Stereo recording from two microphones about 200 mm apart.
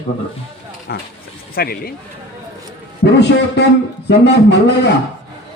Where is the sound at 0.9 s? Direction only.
50° left (ahead or behind).